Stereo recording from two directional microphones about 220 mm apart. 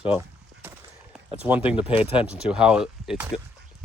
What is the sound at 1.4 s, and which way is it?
Speech, 5° right (ahead or behind).